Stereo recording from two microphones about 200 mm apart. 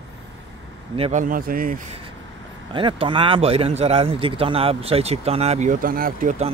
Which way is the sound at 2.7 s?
25° right (ahead or behind).